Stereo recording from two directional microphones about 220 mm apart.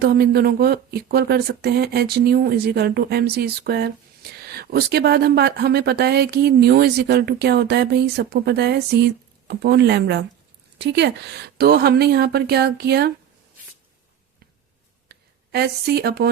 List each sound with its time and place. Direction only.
0.0 s speech: 45° right (ahead or behind)
15.1 s a woman's voice: 45° right (ahead or behind)